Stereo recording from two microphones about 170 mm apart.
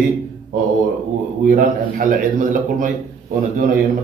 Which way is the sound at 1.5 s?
50° right (ahead or behind).